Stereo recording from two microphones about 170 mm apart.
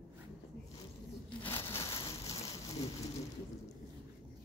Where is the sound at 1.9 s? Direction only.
35° left (ahead or behind).